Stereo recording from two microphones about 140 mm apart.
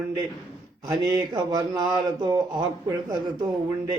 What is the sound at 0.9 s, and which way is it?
Speech, 25° right (ahead or behind).